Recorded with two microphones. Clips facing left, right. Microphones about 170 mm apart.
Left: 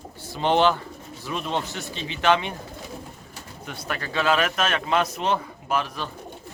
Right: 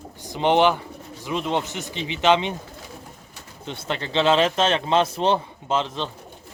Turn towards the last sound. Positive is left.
turn(degrees=-25)  # may be behind; listen again after turning